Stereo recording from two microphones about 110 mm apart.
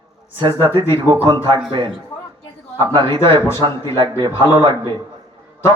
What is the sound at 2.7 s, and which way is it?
Speech, 50° right (ahead or behind).